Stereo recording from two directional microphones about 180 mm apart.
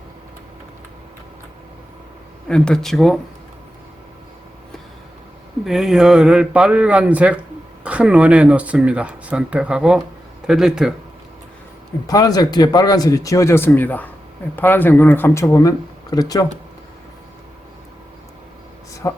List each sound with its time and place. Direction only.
2.5 s speech: 5° left (ahead or behind)
5.6 s speech: centre (ahead or behind)
12.0 s speech: 20° left (ahead or behind)
19.0 s speech: 20° left (ahead or behind)